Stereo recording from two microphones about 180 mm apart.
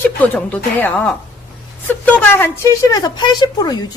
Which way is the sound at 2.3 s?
10° left (ahead or behind).